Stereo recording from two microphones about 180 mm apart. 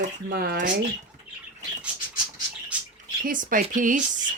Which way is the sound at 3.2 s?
50° right (ahead or behind).